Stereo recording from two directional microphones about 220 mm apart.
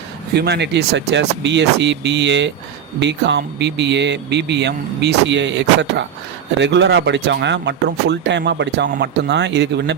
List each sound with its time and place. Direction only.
0.3 s a man's voice: 50° right (ahead or behind)